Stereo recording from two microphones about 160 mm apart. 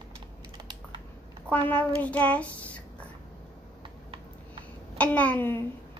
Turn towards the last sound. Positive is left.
turn(degrees=15)  # may be behind; listen again after turning